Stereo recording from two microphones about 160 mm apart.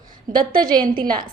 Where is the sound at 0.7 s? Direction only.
25° right (ahead or behind).